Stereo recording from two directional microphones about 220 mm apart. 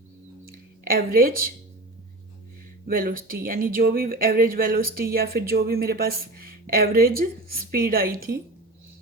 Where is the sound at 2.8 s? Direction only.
40° right (ahead or behind).